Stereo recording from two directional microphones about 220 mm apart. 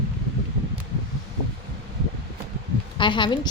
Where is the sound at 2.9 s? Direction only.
20° left (ahead or behind).